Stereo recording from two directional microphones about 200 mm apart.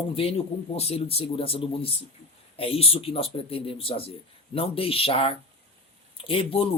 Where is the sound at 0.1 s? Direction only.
30° left (ahead or behind).